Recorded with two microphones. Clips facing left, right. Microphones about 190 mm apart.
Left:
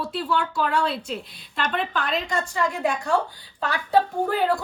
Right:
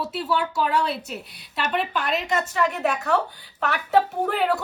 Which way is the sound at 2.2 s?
20° right (ahead or behind).